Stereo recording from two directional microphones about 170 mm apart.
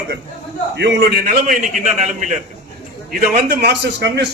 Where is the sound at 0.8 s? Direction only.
85° right; by 2.4 s 45° right (ahead or behind).